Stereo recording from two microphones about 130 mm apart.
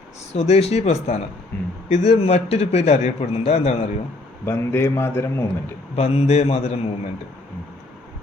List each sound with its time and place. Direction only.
0.3 s a man's voice: 55° left (ahead or behind)
4.4 s speech: 20° left (ahead or behind)
6.0 s a man's voice: 50° left (ahead or behind)